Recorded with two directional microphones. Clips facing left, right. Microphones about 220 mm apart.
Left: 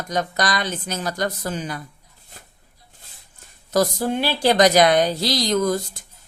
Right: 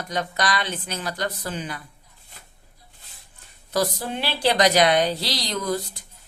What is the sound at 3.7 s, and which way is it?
A woman's voice, 45° left (ahead or behind).